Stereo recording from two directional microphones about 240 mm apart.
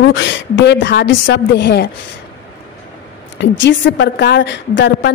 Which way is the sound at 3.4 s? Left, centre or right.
Left.